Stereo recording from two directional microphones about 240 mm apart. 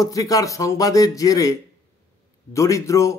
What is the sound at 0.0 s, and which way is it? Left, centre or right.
Speech, centre.